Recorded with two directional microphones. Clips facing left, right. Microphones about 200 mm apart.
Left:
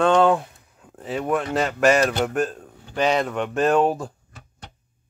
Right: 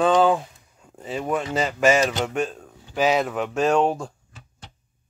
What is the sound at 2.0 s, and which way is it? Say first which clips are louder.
Speech: left 2 dB; 60° left (ahead or behind).